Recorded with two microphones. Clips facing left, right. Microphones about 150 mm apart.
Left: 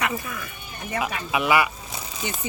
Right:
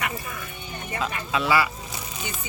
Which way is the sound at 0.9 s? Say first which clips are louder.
Left 2 dB; 15° left (ahead or behind).